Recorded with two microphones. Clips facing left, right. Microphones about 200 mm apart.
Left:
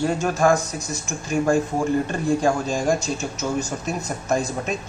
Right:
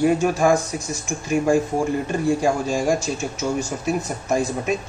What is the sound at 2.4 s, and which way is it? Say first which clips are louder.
A man's voice: right 1 dB; 10° right (ahead or behind).